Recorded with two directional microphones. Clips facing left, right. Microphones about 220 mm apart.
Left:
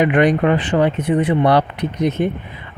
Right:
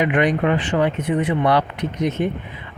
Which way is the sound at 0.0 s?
40° left (ahead or behind).